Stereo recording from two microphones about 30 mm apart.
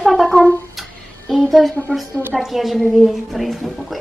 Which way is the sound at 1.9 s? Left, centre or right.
Left.